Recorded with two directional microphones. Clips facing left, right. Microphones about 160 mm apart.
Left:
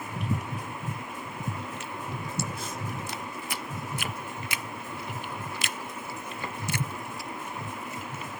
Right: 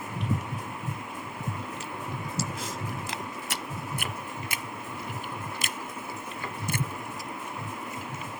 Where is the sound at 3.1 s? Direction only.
65° right (ahead or behind).